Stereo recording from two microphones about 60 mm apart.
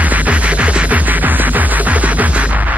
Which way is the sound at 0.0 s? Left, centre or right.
Right.